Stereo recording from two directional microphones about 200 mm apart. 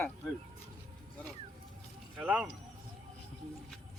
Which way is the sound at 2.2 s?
5° right (ahead or behind).